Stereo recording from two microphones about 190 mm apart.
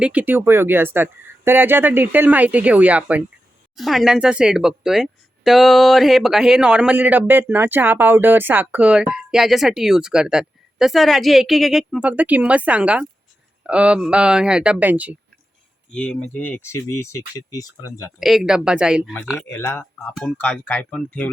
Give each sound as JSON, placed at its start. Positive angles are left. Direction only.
{"t": 0.0, "sound": "speech", "side_deg": -5}
{"t": 15.9, "sound": "speech", "side_deg": 5}
{"t": 18.2, "sound": "speech", "side_deg": 0}
{"t": 19.5, "sound": "speech", "side_deg": 10}